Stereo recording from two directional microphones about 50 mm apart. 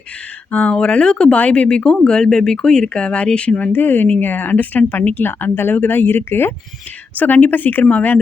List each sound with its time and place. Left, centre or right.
0.5 s speech: left
3.7 s speech: left
7.2 s speech: left